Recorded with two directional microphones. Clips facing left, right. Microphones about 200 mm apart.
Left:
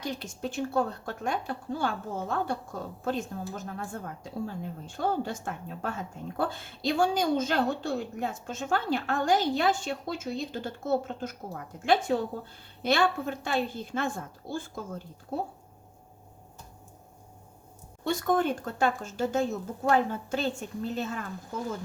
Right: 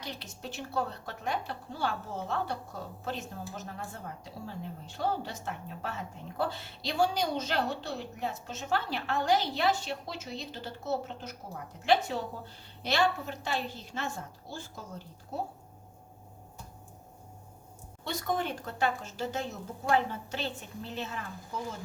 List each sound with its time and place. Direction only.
0.0 s speech: 50° left (ahead or behind)
18.0 s speech: 50° left (ahead or behind)